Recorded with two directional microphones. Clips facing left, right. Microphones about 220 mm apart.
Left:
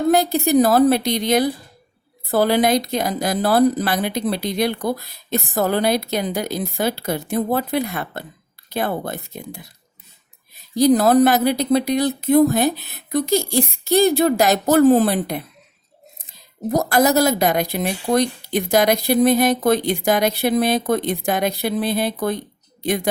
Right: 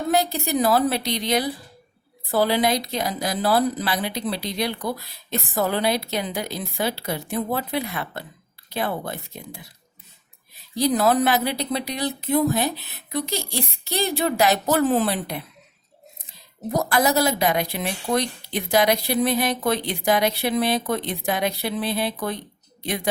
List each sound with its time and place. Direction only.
0.1 s speech: 50° left (ahead or behind)
10.8 s speech: 40° left (ahead or behind)
16.7 s speech: 45° left (ahead or behind)